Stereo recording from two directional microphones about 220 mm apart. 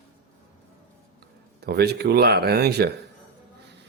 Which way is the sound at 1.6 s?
50° right (ahead or behind).